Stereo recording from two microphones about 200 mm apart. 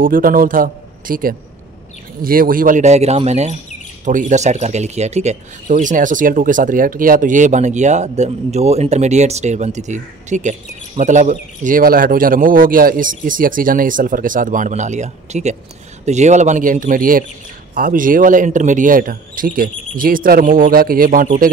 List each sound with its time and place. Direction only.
0.0 s a man's voice: 45° right (ahead or behind)